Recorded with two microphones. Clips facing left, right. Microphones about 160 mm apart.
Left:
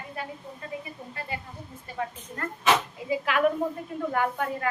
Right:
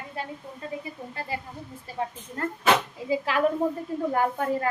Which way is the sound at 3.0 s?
30° right (ahead or behind).